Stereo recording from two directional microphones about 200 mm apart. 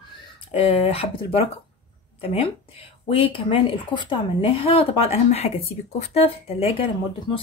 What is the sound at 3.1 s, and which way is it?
Speech, 25° left (ahead or behind).